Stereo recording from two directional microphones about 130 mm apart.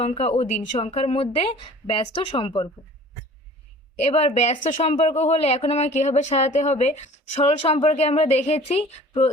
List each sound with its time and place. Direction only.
0.0 s a woman's voice: 55° left (ahead or behind)
3.9 s speech: 55° left (ahead or behind)